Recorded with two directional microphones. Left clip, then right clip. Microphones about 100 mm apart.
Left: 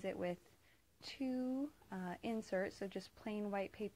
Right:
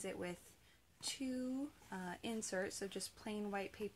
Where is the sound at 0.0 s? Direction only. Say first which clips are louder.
Left 4 dB; 25° left (ahead or behind).